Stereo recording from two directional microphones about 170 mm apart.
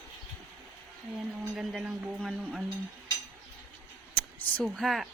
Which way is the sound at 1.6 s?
5° right (ahead or behind).